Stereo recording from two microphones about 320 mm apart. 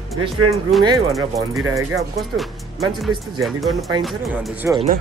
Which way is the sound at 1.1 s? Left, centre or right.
Centre.